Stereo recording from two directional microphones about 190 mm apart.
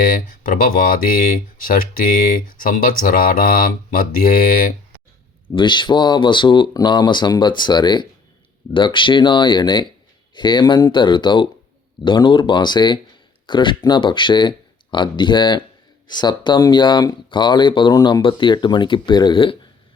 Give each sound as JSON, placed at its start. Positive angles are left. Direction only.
{"t": 0.1, "sound": "speech", "side_deg": 45}
{"t": 5.5, "sound": "speech", "side_deg": 25}